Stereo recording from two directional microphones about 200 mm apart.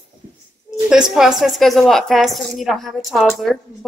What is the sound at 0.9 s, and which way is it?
A woman's voice, centre (ahead or behind).